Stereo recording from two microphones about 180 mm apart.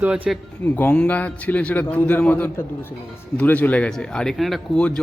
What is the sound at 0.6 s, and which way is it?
A man's voice, 10° left (ahead or behind).